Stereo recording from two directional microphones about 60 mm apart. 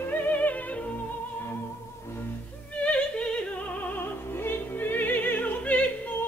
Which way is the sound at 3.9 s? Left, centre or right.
Left.